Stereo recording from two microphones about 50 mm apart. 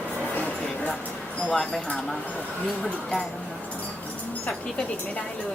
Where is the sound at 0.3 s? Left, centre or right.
Left.